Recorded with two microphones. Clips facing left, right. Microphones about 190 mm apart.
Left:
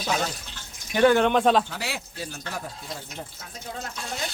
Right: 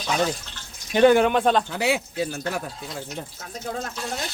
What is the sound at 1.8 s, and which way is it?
Speech, 60° right (ahead or behind).